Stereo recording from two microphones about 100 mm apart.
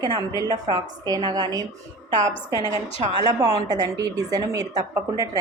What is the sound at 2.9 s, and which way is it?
Speech, 65° left (ahead or behind).